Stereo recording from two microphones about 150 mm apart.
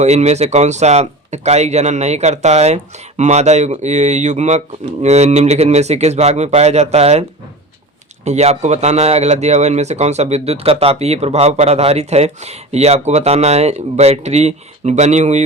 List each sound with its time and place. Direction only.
0.0 s speech: 50° right (ahead or behind)